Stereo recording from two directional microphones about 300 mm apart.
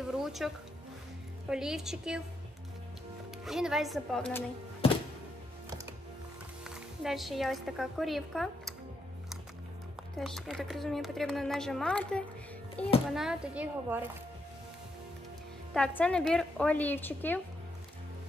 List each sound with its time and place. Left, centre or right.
0.0 s music: centre
1.5 s a woman's voice: centre
3.4 s a woman's voice: centre
4.8 s music: centre
6.6 s a woman's voice: centre
10.1 s a woman's voice: centre
15.7 s a woman's voice: centre